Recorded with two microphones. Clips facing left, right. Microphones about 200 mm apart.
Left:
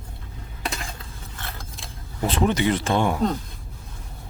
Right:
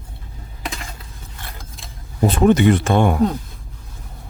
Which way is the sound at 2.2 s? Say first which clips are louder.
Right 7 dB; 50° right (ahead or behind).